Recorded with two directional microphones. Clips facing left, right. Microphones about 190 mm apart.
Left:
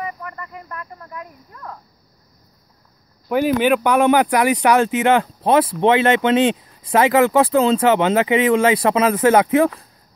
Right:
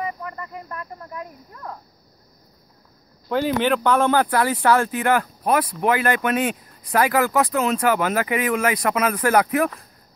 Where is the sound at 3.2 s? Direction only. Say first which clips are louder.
Left 4 dB; 10° left (ahead or behind).